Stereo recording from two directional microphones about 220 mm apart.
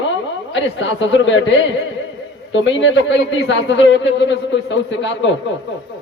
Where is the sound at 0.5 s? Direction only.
55° left (ahead or behind).